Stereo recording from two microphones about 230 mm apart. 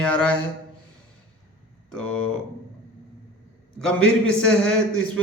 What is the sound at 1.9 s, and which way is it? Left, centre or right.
Speech, centre.